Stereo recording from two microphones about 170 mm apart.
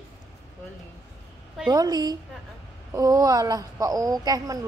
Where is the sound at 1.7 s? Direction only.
25° right (ahead or behind).